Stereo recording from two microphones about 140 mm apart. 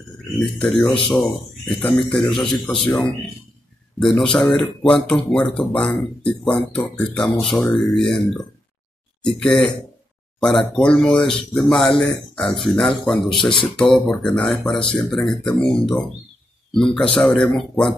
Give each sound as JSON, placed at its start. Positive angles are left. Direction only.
{"t": 0.4, "sound": "speech", "side_deg": 5}
{"t": 0.8, "sound": "speech", "side_deg": 35}
{"t": 1.1, "sound": "a man's voice", "side_deg": 0}
{"t": 10.7, "sound": "speech", "side_deg": 5}